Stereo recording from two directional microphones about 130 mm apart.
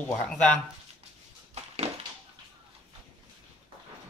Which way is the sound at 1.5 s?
55° right (ahead or behind).